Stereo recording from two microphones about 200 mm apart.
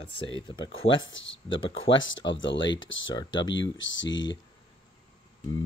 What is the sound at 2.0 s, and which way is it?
Speech, 70° left (ahead or behind).